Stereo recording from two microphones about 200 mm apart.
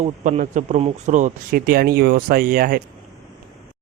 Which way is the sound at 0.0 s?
40° right (ahead or behind).